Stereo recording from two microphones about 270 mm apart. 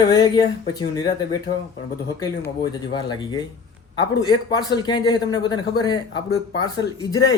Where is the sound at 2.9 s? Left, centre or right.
Centre.